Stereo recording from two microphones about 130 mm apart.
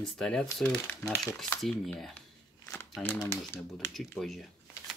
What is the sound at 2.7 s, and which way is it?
Crumpling, 10° left (ahead or behind).